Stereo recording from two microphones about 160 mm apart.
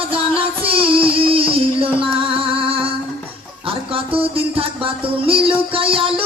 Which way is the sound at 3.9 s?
35° right (ahead or behind).